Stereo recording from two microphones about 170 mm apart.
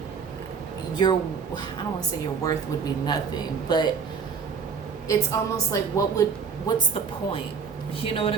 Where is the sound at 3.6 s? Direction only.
25° left (ahead or behind).